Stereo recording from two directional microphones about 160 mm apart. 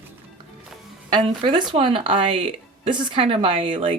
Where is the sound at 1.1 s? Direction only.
30° right (ahead or behind).